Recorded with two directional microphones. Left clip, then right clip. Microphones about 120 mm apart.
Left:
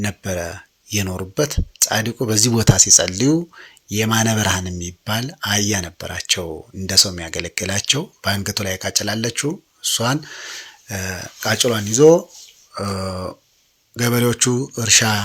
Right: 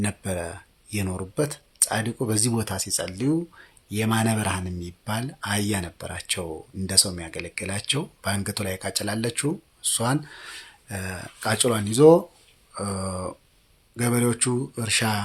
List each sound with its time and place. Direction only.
0.0 s speech: 10° left (ahead or behind); by 3.4 s 35° left (ahead or behind)
3.5 s speech: 20° left (ahead or behind); by 12.2 s 5° left (ahead or behind)
12.7 s speech: 20° left (ahead or behind)